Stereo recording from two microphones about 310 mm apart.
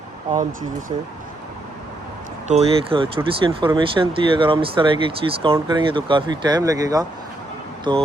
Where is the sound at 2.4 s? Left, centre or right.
Right.